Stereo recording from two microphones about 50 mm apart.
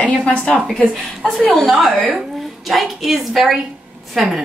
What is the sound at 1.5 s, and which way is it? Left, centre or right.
Speech, centre.